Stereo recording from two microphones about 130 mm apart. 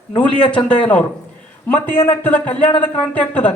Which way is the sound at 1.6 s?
15° left (ahead or behind).